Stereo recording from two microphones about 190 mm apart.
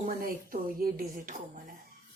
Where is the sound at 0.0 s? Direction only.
45° right (ahead or behind).